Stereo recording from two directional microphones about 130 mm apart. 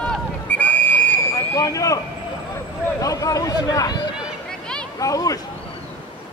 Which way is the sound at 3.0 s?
25° left (ahead or behind).